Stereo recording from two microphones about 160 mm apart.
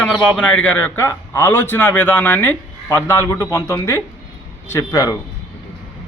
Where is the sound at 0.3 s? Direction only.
5° left (ahead or behind).